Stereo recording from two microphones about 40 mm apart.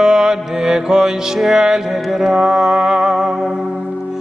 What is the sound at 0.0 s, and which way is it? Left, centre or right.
Music, centre.